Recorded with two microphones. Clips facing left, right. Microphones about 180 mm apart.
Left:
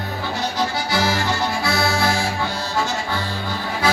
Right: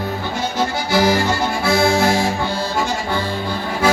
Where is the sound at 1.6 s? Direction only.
45° right (ahead or behind).